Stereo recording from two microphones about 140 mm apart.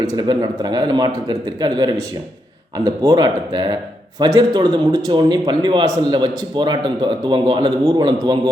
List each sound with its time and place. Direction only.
0.0 s a man's voice: 25° right (ahead or behind)